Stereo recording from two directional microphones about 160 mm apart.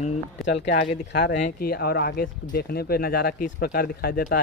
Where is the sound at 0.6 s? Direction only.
90° left.